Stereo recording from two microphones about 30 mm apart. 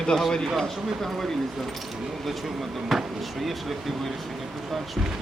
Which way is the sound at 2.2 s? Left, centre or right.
Centre.